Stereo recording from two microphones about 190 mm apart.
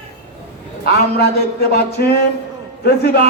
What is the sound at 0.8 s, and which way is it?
Speech, 60° left (ahead or behind).